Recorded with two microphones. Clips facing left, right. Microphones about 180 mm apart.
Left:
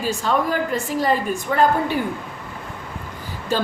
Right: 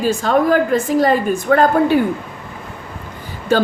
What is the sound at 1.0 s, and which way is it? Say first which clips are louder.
Speech: right 6 dB; 70° right (ahead or behind).